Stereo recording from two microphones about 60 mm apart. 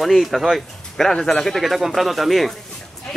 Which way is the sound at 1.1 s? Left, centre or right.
Centre.